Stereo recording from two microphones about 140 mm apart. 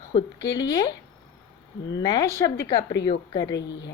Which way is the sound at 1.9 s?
30° left (ahead or behind).